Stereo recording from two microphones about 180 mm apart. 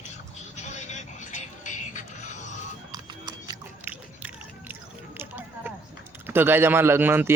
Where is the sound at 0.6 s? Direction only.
40° left (ahead or behind).